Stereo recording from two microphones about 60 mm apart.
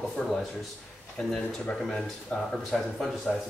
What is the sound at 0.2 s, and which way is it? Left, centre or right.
Speech, left.